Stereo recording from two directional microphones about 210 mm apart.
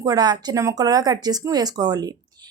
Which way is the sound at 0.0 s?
20° right (ahead or behind).